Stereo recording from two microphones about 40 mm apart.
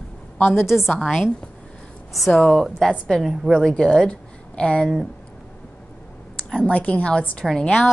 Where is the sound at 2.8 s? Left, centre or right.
Centre.